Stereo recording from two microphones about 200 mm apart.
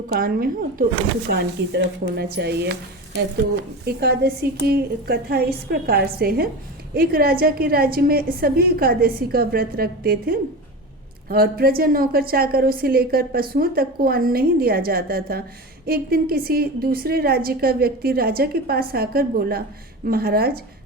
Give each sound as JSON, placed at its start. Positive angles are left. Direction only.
{"t": 0.1, "sound": "a woman's voice", "side_deg": -50}
{"t": 3.9, "sound": "a woman's voice", "side_deg": -50}